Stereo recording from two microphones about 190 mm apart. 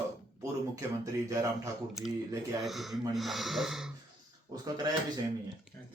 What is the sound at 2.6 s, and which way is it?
Speech, centre (ahead or behind).